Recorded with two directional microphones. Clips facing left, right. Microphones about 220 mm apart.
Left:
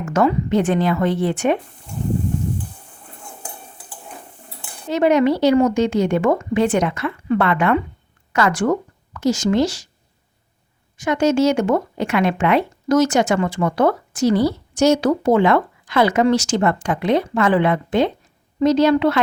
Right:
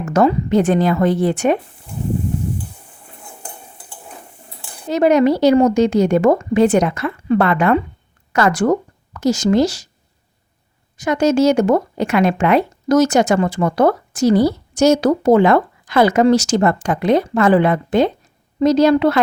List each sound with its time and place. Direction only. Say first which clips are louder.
0.0 s speech: right 3 dB; 35° right (ahead or behind)
4.9 s speech: right 2 dB; 40° right (ahead or behind)
10.9 s speech: right 2 dB; 40° right (ahead or behind)